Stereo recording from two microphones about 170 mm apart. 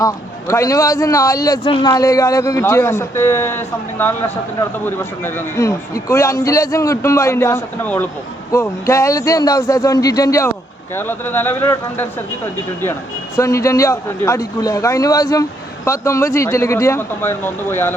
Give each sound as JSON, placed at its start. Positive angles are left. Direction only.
{"t": 0.0, "sound": "a man's voice", "side_deg": 20}